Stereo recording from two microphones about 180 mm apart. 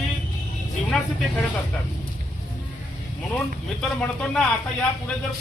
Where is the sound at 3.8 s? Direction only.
5° left (ahead or behind).